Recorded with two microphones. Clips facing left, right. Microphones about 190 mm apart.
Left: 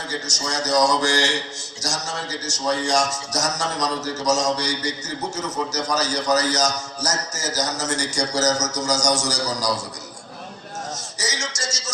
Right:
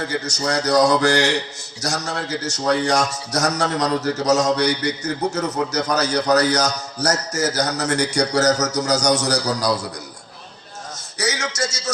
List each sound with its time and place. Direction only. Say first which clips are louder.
0.1 s a man's voice: right 6 dB; 60° right (ahead or behind)
11.2 s a man's voice: right 8 dB; 60° right (ahead or behind)